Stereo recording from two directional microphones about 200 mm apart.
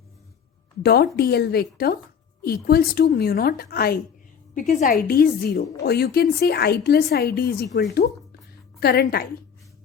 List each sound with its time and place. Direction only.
0.8 s a woman's voice: 50° left (ahead or behind)